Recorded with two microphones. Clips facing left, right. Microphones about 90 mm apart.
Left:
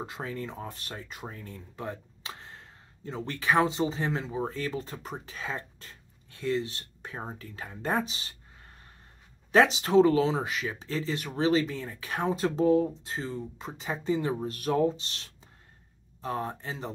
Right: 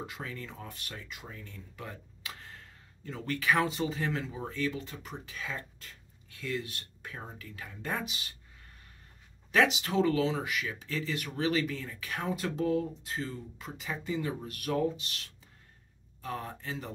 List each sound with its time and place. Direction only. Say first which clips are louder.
0.0 s speech: left 5 dB; 30° left (ahead or behind)